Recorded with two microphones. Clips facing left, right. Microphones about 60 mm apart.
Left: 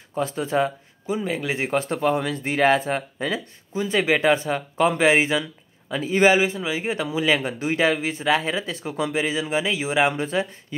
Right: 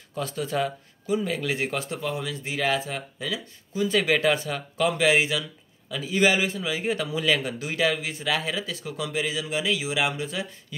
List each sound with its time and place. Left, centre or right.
0.1 s speech: left
1.9 s speech: left
3.7 s a man's voice: left